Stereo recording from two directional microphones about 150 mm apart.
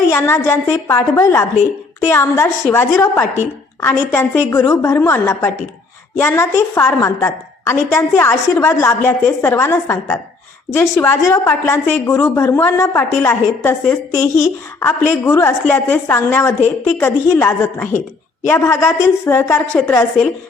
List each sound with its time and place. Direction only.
0.1 s a woman's voice: 15° left (ahead or behind)